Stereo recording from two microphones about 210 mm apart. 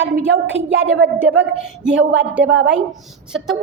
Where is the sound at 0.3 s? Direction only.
60° right (ahead or behind).